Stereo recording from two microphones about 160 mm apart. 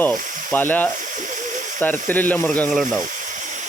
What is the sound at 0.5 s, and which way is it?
Speech, 10° left (ahead or behind).